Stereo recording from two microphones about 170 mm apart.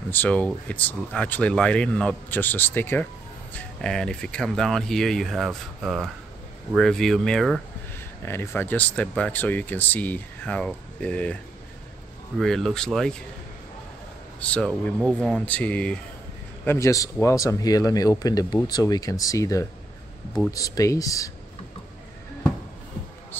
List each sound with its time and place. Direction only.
0.1 s speech: 10° left (ahead or behind)
8.3 s speech: 15° left (ahead or behind)
12.4 s speech: 5° left (ahead or behind)
14.4 s speech: 5° left (ahead or behind)
14.7 s speech: 5° right (ahead or behind)
16.6 s speech: 15° left (ahead or behind)